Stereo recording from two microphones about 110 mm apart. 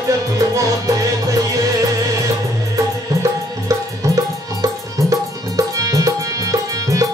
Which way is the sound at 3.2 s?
30° right (ahead or behind).